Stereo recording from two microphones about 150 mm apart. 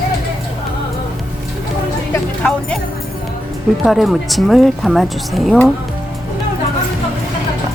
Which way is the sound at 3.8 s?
Centre (ahead or behind).